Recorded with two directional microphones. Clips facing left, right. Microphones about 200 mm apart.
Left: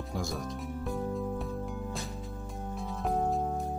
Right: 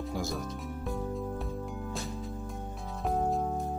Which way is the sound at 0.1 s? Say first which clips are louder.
Left 1 dB; centre (ahead or behind).